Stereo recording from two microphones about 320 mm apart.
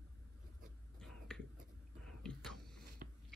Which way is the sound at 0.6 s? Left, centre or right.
Centre.